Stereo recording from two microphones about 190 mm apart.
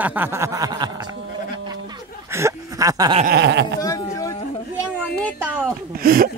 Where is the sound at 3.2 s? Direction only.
60° right (ahead or behind).